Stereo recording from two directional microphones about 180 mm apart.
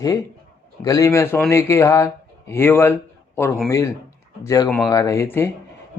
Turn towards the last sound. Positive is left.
turn(degrees=10)  # may be behind; listen again after turning